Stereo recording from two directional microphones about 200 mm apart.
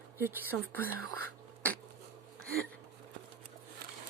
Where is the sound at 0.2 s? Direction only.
10° right (ahead or behind).